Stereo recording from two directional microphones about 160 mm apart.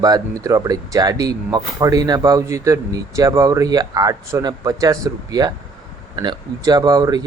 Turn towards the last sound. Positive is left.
turn(degrees=-25)  # may be behind; listen again after turning